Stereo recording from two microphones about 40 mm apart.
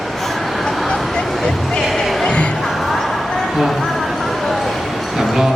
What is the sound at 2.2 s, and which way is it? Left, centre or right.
Music, left.